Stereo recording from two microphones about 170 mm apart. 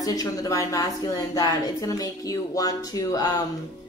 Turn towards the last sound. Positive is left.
turn(degrees=20)  # may be behind; listen again after turning